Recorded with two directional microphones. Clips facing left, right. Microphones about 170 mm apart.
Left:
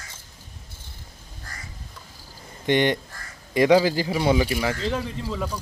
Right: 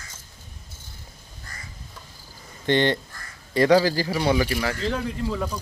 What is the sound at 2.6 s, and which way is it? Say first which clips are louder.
Speech: even; 15° left (ahead or behind).